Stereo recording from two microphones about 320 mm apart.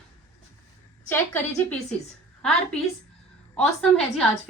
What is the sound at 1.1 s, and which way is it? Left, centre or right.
Speech, centre.